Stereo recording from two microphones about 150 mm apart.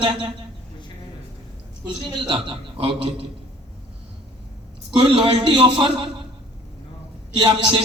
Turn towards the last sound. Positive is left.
turn(degrees=-30)  # may be behind; listen again after turning